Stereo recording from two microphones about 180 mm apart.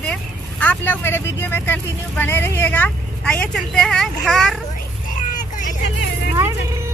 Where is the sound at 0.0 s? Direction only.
5° left (ahead or behind).